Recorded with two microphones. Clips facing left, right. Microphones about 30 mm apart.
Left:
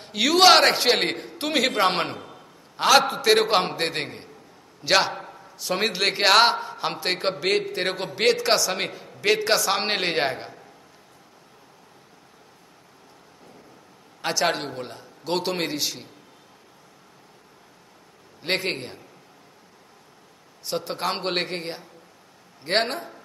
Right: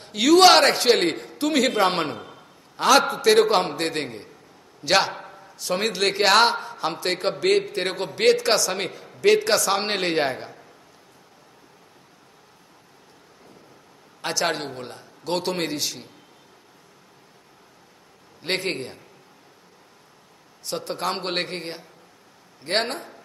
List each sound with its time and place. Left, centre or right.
0.0 s a man's voice: centre
2.1 s a sound: centre
2.8 s a man's voice: centre
4.8 s a sound: centre
5.8 s a man's voice: centre
14.2 s a man's voice: centre
18.4 s a man's voice: centre
20.6 s a man's voice: centre